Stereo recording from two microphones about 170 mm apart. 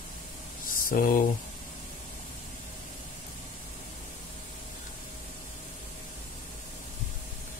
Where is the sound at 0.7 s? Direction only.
55° left (ahead or behind).